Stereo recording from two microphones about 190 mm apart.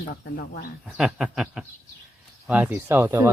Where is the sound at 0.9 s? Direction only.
5° right (ahead or behind).